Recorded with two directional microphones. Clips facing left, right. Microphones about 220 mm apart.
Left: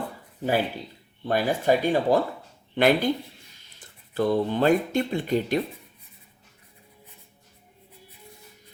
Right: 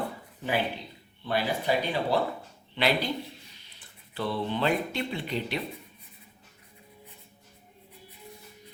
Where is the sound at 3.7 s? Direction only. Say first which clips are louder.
Left 9 dB; 45° left (ahead or behind).